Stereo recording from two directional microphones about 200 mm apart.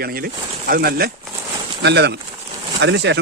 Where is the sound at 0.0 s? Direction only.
50° right (ahead or behind).